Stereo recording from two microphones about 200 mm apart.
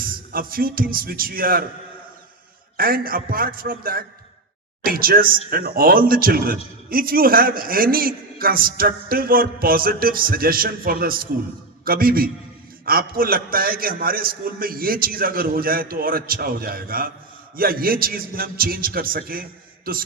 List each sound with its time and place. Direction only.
0.0 s speech: 45° right (ahead or behind)
2.7 s a man's voice: 45° right (ahead or behind)